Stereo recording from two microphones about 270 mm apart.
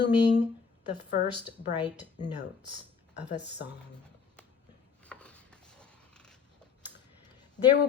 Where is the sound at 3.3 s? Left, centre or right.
Left.